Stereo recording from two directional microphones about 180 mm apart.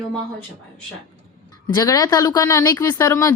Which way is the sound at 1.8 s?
20° left (ahead or behind).